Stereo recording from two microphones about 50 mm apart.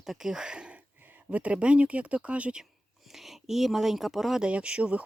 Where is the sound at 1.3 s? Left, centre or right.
Right.